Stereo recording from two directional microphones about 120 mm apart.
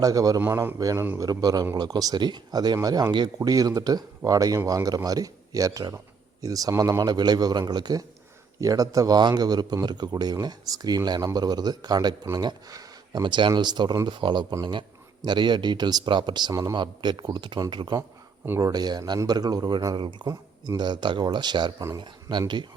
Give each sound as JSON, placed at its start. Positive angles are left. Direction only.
{"t": 0.0, "sound": "speech", "side_deg": -30}
{"t": 0.4, "sound": "a man's voice", "side_deg": -20}
{"t": 20.2, "sound": "speech", "side_deg": -30}